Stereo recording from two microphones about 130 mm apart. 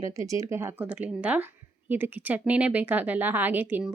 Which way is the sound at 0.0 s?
25° right (ahead or behind).